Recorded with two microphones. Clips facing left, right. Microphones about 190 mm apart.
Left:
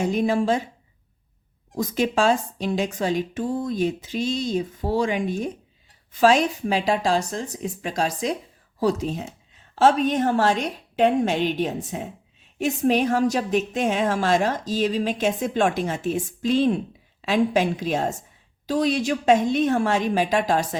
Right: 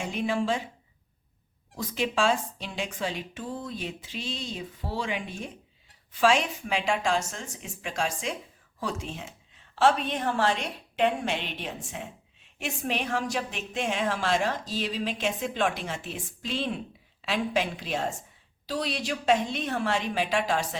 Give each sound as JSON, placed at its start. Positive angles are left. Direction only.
{"t": 0.0, "sound": "a woman's voice", "side_deg": 40}
{"t": 1.7, "sound": "a woman's voice", "side_deg": 40}